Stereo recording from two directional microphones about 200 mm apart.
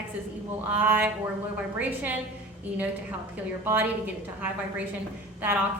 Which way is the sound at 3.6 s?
10° right (ahead or behind).